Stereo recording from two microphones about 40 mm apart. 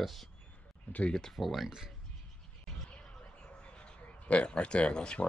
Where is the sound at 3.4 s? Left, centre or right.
Left.